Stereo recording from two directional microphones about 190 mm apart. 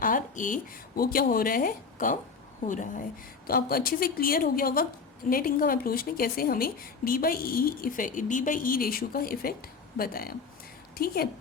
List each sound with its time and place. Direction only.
0.0 s a woman's voice: 45° left (ahead or behind)